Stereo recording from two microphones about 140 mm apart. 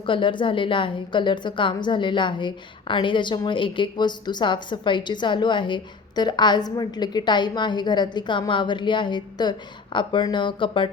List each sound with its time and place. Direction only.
0.0 s a woman's voice: 35° left (ahead or behind)